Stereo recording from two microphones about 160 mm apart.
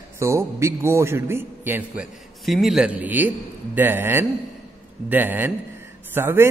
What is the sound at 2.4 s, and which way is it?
A man's voice, centre (ahead or behind).